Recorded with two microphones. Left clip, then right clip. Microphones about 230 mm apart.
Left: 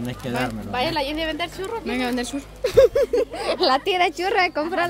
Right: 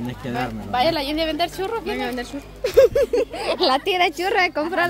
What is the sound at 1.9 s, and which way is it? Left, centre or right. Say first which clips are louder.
Speech: left 1 dB; left.